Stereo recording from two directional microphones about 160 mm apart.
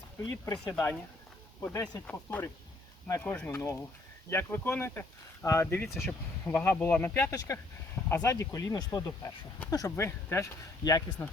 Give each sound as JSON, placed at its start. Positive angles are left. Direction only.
{"t": 0.3, "sound": "speech", "side_deg": 20}